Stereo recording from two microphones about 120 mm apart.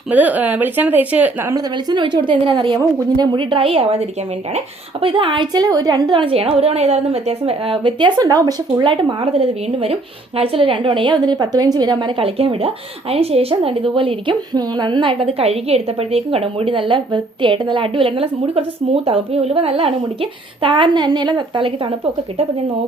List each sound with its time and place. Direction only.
0.1 s speech: 15° right (ahead or behind)
1.5 s a woman's voice: 35° right (ahead or behind)
9.2 s a woman's voice: 55° right (ahead or behind)
14.5 s a woman's voice: 35° right (ahead or behind)